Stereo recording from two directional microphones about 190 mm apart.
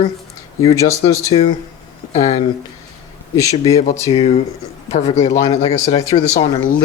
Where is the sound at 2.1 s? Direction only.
35° left (ahead or behind).